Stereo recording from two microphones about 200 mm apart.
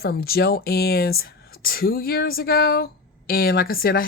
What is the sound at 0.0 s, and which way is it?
Speech, 50° left (ahead or behind).